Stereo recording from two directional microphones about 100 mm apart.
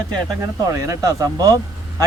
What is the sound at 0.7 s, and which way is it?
Speech, 35° right (ahead or behind).